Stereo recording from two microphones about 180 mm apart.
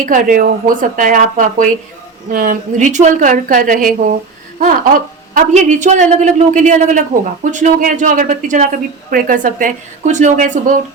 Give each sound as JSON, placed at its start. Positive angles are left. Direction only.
{"t": 0.0, "sound": "a woman's voice", "side_deg": -50}